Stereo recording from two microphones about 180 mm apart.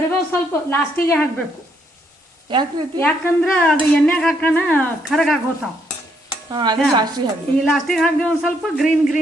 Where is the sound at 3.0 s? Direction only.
10° left (ahead or behind).